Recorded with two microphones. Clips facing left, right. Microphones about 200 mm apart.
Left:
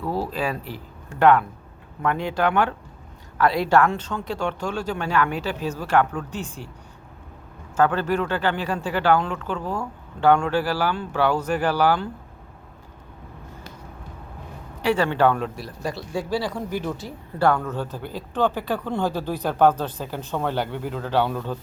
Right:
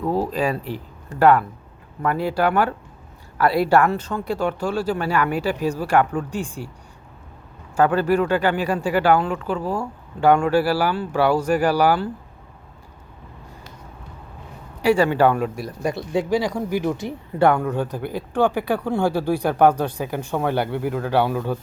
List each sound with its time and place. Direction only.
0.0 s speech: 15° right (ahead or behind)
0.3 s speech: 40° right (ahead or behind)
1.2 s speech: 5° right (ahead or behind)
7.8 s speech: 10° right (ahead or behind)
14.8 s speech: 10° right (ahead or behind)